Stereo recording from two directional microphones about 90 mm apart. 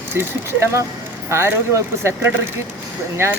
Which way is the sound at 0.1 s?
25° right (ahead or behind).